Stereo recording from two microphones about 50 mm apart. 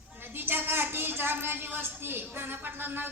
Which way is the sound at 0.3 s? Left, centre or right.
Right.